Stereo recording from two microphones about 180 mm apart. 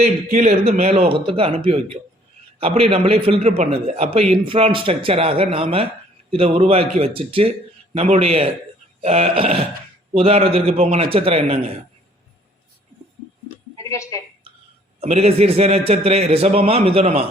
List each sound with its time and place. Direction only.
0.0 s a man's voice: 45° right (ahead or behind)
13.7 s a sound: 20° left (ahead or behind)
15.0 s a man's voice: 35° right (ahead or behind)